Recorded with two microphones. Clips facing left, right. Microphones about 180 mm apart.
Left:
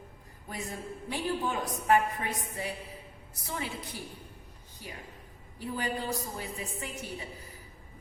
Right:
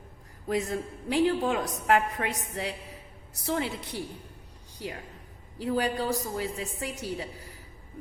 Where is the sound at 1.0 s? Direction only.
80° right.